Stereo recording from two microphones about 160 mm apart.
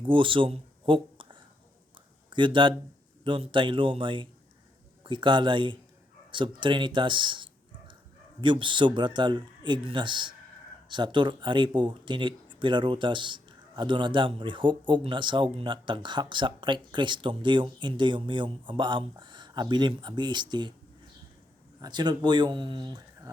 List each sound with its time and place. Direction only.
0.0 s speech: 30° right (ahead or behind)
21.8 s speech: 25° right (ahead or behind)